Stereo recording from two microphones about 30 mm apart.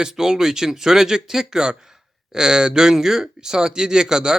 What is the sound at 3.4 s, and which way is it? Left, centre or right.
Speech, right.